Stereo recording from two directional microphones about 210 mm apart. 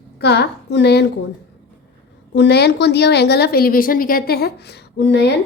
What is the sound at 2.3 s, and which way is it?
A woman's voice, 50° left (ahead or behind).